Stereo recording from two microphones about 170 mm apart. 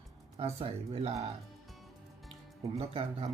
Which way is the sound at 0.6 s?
35° right (ahead or behind).